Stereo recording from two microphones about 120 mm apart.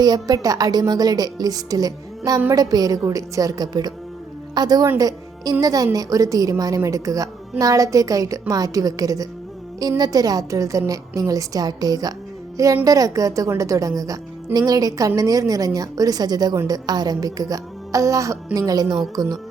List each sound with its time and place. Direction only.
0.0 s a woman's voice: 35° right (ahead or behind)